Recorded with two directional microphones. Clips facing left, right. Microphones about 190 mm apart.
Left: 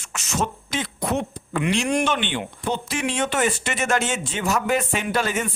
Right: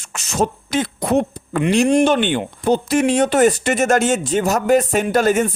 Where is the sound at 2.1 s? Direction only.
45° right (ahead or behind).